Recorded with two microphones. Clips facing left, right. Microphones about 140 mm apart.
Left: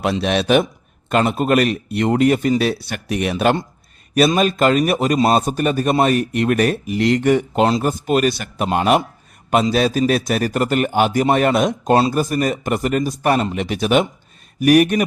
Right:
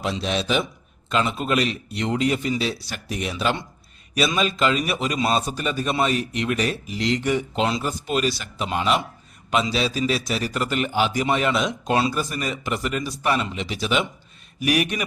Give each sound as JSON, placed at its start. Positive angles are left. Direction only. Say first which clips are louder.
{"t": 0.0, "sound": "a man's voice", "louder": "left 6 dB", "side_deg": 65}